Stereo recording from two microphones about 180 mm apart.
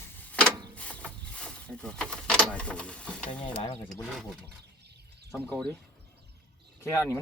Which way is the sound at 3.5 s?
35° left (ahead or behind).